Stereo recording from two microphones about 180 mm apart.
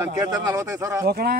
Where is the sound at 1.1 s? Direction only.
60° right (ahead or behind).